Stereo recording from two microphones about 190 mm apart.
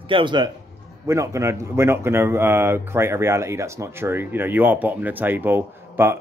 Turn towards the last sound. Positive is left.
turn(degrees=-10)  # may be behind; listen again after turning